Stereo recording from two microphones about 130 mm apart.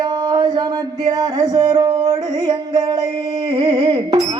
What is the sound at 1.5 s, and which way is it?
Music, 30° right (ahead or behind).